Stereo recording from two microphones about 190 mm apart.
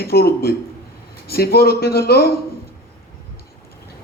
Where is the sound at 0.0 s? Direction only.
55° left (ahead or behind).